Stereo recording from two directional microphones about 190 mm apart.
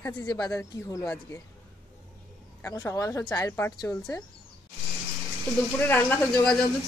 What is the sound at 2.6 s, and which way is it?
Speech, 15° left (ahead or behind).